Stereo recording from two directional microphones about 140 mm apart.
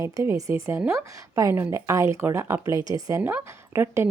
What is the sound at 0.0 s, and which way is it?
Speech, 25° right (ahead or behind).